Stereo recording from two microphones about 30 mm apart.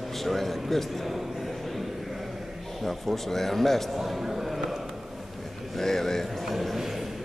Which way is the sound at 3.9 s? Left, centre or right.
Centre.